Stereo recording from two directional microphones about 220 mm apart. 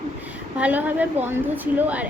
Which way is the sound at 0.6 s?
10° right (ahead or behind).